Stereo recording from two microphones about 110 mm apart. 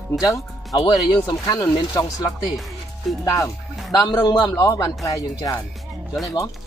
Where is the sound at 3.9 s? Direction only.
40° left (ahead or behind).